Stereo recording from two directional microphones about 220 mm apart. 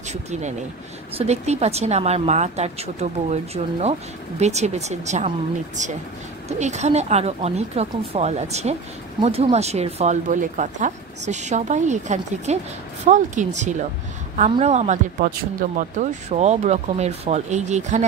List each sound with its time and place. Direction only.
0.1 s a woman's voice: 30° right (ahead or behind)